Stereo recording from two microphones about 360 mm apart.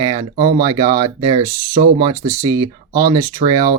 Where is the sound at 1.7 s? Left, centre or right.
Right.